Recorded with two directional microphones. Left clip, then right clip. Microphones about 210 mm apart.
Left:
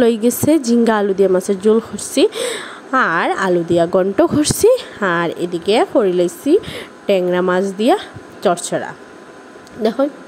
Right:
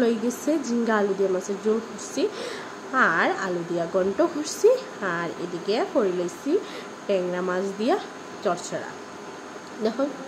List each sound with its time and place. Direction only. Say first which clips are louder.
0.0 s a woman's voice: left 10 dB; 45° left (ahead or behind)